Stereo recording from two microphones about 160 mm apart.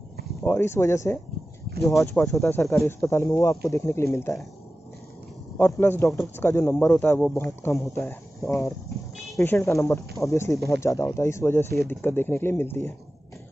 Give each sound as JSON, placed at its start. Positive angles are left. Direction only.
{"t": 0.4, "sound": "speech", "side_deg": 15}
{"t": 5.6, "sound": "speech", "side_deg": 15}